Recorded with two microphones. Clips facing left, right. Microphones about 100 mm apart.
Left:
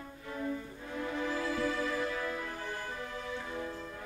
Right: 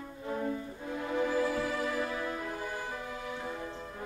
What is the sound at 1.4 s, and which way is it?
Music, 15° right (ahead or behind).